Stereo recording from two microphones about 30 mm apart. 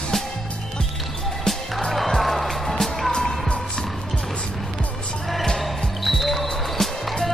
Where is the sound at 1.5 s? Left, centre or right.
Left.